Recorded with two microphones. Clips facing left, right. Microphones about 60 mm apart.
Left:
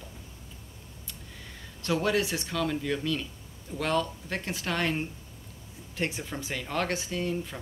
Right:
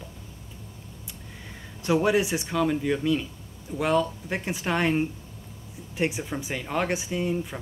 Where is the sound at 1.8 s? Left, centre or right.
Centre.